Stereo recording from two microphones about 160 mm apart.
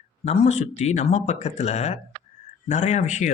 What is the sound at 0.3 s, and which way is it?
Speech, 45° left (ahead or behind).